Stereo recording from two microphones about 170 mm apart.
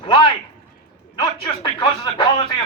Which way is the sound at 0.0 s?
30° left (ahead or behind).